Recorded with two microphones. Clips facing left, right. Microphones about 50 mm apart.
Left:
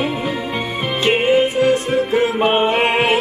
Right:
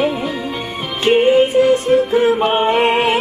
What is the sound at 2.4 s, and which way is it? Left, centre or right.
Music, centre.